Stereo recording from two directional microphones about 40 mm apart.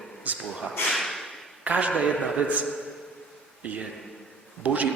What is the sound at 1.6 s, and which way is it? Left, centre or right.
A man's voice, right.